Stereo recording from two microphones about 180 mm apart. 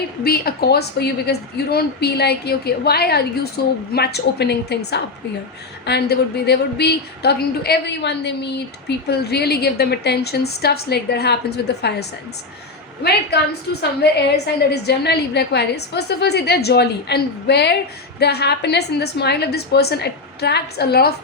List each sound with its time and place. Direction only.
0.3 s a woman's voice: 60° left (ahead or behind)